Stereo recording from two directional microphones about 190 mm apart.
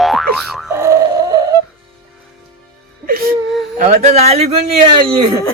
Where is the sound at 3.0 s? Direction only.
50° right (ahead or behind).